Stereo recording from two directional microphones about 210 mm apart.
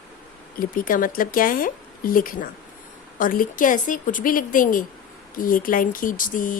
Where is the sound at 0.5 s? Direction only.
40° left (ahead or behind).